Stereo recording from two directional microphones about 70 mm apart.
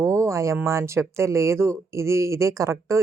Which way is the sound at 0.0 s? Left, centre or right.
Right.